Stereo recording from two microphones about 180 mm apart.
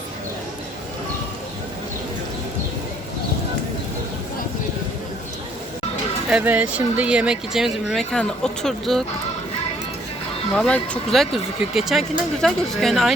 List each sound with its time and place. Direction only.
6.3 s speech: 10° right (ahead or behind)
10.5 s speech: 5° left (ahead or behind)